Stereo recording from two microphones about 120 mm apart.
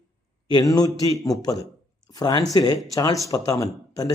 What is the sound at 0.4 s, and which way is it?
Speech, 35° left (ahead or behind).